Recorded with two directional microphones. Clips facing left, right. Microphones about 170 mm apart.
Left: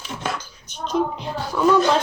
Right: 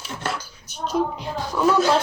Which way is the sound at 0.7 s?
5° right (ahead or behind).